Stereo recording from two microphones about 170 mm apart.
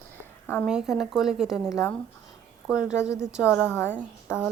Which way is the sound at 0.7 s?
5° right (ahead or behind).